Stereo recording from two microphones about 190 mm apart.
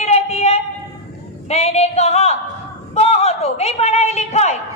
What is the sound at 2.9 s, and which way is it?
A woman's voice, 35° left (ahead or behind).